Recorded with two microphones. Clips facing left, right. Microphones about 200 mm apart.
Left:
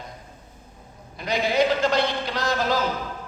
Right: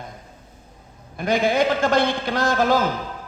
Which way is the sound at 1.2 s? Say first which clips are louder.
Right 3 dB; 50° right (ahead or behind).